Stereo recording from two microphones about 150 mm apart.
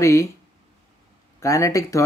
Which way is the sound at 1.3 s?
20° left (ahead or behind).